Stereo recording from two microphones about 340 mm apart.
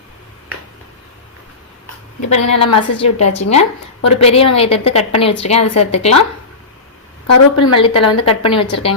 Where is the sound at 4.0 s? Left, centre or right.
Left.